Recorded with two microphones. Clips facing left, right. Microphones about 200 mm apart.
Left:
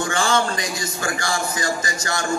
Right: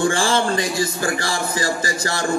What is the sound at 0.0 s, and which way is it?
A man's voice, 30° right (ahead or behind).